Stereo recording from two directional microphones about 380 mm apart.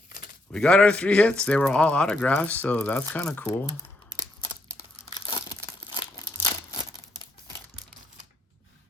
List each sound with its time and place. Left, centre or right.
0.5 s speech: centre
5.0 s crumpling: centre